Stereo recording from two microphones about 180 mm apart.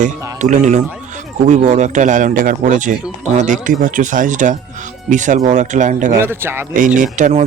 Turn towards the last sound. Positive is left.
turn(degrees=-45)  # may be behind; listen again after turning